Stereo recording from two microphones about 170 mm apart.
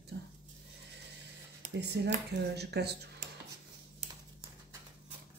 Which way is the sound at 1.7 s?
80° right.